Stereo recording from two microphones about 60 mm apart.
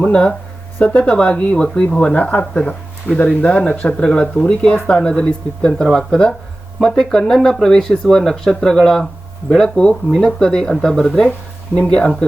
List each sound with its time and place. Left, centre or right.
0.0 s speech: centre
5.7 s speech: centre